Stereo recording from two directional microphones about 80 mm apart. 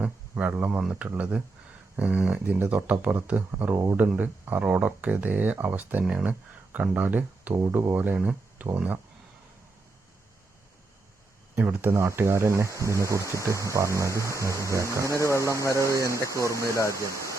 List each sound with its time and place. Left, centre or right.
0.0 s speech: centre
7.5 s speech: right
11.5 s speech: right
11.9 s speech: right
15.1 s speech: left
16.0 s speech: right
16.7 s speech: left